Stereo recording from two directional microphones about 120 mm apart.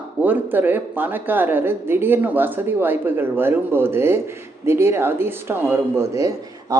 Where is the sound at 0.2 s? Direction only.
15° right (ahead or behind).